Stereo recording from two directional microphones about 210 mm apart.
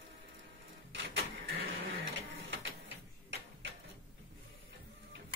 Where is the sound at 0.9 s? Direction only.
65° right (ahead or behind).